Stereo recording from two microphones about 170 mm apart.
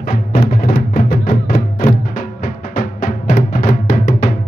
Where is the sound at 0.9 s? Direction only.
50° left (ahead or behind).